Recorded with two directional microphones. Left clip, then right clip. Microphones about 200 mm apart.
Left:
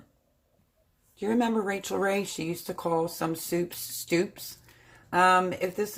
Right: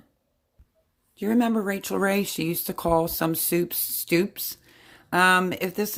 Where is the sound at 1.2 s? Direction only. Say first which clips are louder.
Right 2 dB; 35° right (ahead or behind).